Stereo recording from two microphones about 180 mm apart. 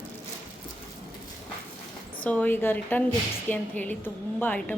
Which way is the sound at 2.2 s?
10° left (ahead or behind).